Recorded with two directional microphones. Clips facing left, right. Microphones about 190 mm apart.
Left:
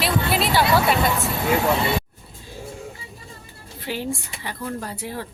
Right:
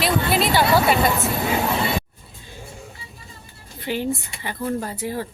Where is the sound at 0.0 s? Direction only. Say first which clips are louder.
Right 2 dB; centre (ahead or behind).